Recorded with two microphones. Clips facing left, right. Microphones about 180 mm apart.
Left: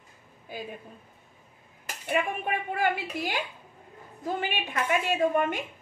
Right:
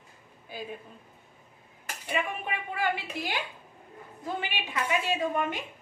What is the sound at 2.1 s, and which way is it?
A woman's voice, 50° left (ahead or behind).